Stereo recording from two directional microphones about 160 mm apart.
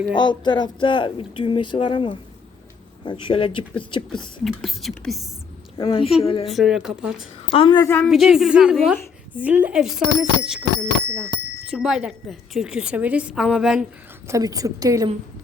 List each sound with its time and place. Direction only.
0.2 s speech: 30° left (ahead or behind)
4.4 s a woman's voice: centre (ahead or behind)
5.8 s speech: 35° left (ahead or behind)
6.5 s a woman's voice: centre (ahead or behind)
7.5 s speech: 30° left (ahead or behind)
7.8 s a woman's voice: 15° left (ahead or behind)
8.0 s a woman's voice: centre (ahead or behind)
14.3 s a woman's voice: 20° right (ahead or behind)